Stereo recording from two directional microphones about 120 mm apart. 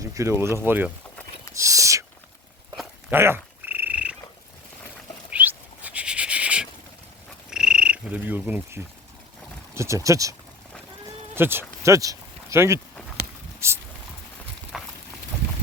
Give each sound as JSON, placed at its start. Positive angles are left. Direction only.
{"t": 0.0, "sound": "speech", "side_deg": -25}
{"t": 1.5, "sound": "whispering", "side_deg": -25}
{"t": 3.1, "sound": "frog", "side_deg": -20}
{"t": 5.3, "sound": "a sound", "side_deg": -15}
{"t": 7.5, "sound": "frog", "side_deg": -5}
{"t": 9.7, "sound": "speech", "side_deg": -25}
{"t": 11.3, "sound": "speech", "side_deg": -20}
{"t": 11.8, "sound": "a sound", "side_deg": -25}
{"t": 14.7, "sound": "a sound", "side_deg": -5}